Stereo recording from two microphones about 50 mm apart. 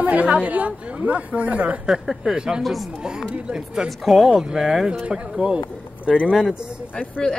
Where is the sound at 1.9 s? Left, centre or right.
Centre.